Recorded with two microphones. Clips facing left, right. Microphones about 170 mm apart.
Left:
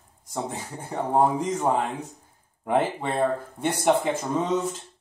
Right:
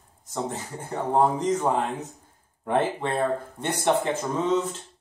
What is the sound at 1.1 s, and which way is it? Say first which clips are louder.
Speech: right 1 dB; 10° left (ahead or behind).